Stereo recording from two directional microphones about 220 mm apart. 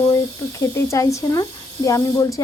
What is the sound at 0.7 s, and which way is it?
Speech, 15° left (ahead or behind).